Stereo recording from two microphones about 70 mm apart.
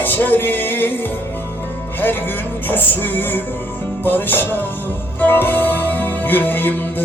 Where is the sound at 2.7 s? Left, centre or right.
Left.